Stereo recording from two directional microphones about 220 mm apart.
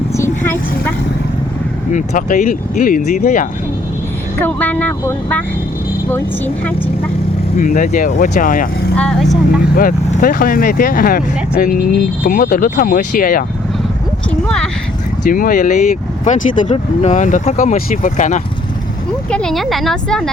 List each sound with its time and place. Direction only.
0.1 s vehicle: 10° left (ahead or behind)
1.9 s speech: 35° left (ahead or behind)
4.4 s speech: 10° left (ahead or behind)
7.6 s speech: 35° left (ahead or behind)
9.0 s speech: centre (ahead or behind)
9.7 s speech: 40° left (ahead or behind)
12.2 s speech: 40° left (ahead or behind)
14.3 s clip-clop: 5° left (ahead or behind)
15.3 s speech: 40° left (ahead or behind)
19.3 s speech: 5° left (ahead or behind)